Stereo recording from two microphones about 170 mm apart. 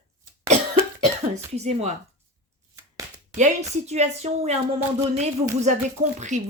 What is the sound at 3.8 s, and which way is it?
Speech, 40° right (ahead or behind).